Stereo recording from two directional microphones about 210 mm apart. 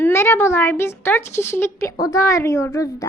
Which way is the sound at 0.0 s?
10° left (ahead or behind).